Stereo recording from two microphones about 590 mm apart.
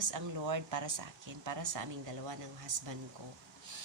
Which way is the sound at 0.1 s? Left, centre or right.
Right.